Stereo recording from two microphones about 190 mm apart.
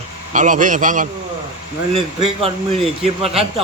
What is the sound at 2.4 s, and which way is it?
Speech, 30° right (ahead or behind).